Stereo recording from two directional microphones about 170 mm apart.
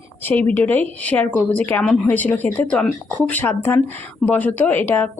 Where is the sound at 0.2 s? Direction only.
10° left (ahead or behind).